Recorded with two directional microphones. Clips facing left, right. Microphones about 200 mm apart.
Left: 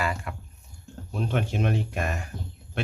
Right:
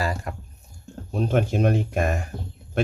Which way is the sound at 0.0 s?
40° right (ahead or behind).